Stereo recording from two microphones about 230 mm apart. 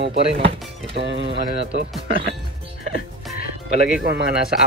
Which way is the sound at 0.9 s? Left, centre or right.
Right.